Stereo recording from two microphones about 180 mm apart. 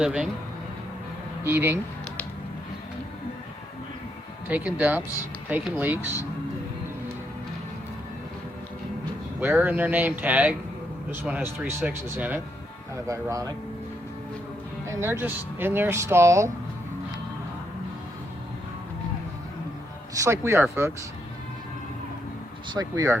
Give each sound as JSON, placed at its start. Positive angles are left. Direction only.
{"t": 0.0, "sound": "speech", "side_deg": -5}
{"t": 1.5, "sound": "speech", "side_deg": -10}
{"t": 4.4, "sound": "speech", "side_deg": -10}
{"t": 9.4, "sound": "speech", "side_deg": -10}
{"t": 14.8, "sound": "speech", "side_deg": -15}
{"t": 20.1, "sound": "speech", "side_deg": -15}
{"t": 22.7, "sound": "speech", "side_deg": -20}